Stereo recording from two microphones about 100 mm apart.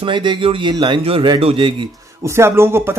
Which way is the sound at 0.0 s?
50° right (ahead or behind).